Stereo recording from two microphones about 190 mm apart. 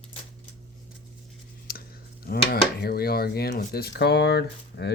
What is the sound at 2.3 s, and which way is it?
Speech, 55° left (ahead or behind).